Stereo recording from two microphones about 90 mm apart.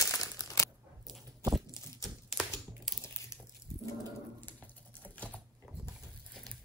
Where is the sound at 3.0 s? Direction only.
30° left (ahead or behind).